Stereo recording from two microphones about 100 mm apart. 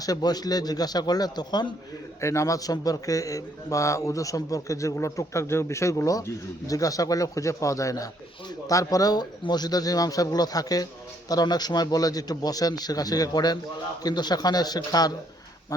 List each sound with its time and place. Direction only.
0.0 s a man's voice: 40° left (ahead or behind)
2.2 s a man's voice: 30° left (ahead or behind)